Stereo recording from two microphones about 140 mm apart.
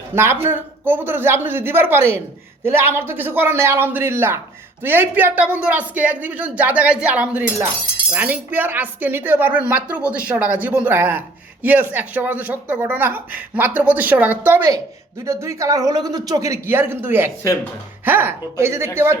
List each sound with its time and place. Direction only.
0.1 s speech: 15° right (ahead or behind)